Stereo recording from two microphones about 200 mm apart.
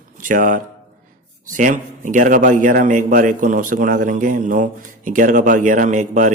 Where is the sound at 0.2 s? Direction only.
40° right (ahead or behind).